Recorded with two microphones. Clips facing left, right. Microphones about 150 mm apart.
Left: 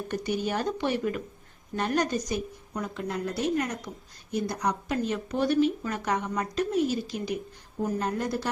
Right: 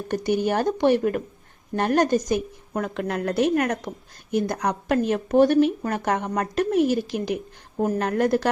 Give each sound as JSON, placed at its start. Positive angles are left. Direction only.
{"t": 0.1, "sound": "a woman's voice", "side_deg": -50}